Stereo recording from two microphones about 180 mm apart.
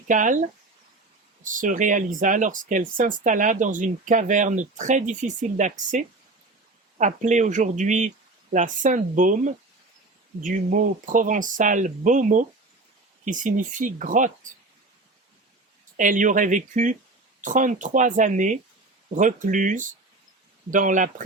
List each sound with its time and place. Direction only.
0.1 s speech: 45° right (ahead or behind)
1.5 s speech: 45° right (ahead or behind)
16.0 s speech: 45° right (ahead or behind)